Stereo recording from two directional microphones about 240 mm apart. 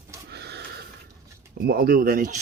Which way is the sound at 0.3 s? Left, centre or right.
Right.